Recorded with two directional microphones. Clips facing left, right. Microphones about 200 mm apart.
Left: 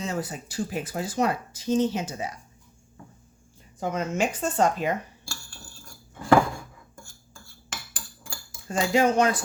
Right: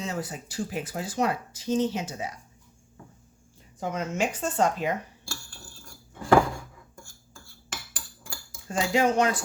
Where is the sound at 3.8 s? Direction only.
45° left (ahead or behind).